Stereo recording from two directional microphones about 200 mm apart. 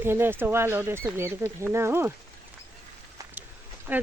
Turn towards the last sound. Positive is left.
turn(degrees=-10)  # may be behind; listen again after turning